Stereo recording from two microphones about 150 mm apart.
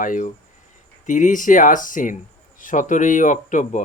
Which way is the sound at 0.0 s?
60° left (ahead or behind).